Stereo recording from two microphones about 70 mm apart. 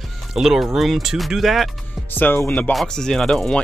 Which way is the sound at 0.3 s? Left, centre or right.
Centre.